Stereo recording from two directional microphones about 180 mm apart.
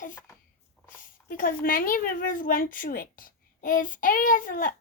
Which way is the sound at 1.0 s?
50° left (ahead or behind).